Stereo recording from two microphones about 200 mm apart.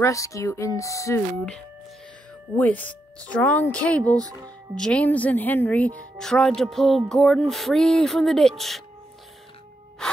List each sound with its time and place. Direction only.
0.0 s speech: 15° left (ahead or behind)
4.2 s speech: 15° right (ahead or behind)
4.7 s a woman's voice: 5° left (ahead or behind)